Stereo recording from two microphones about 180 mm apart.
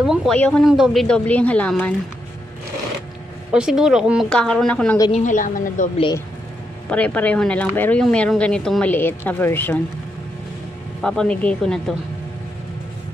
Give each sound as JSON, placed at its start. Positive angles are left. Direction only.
{"t": 0.0, "sound": "speech", "side_deg": 0}
{"t": 3.5, "sound": "speech", "side_deg": -5}
{"t": 5.1, "sound": "a woman's voice", "side_deg": 45}
{"t": 6.9, "sound": "speech", "side_deg": 10}
{"t": 11.0, "sound": "speech", "side_deg": 5}